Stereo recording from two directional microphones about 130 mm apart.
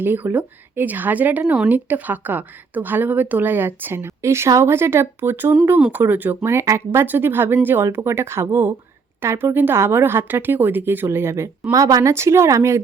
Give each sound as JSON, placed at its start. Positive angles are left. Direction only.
{"t": 0.0, "sound": "speech", "side_deg": -15}